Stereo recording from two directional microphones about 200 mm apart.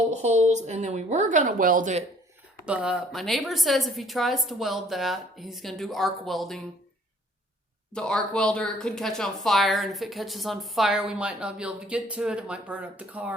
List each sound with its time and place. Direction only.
0.1 s a woman's voice: 35° right (ahead or behind)
2.6 s speech: 5° right (ahead or behind)
7.9 s speech: 5° left (ahead or behind)